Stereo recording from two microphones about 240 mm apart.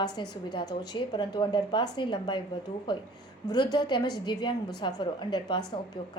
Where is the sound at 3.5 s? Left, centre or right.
Centre.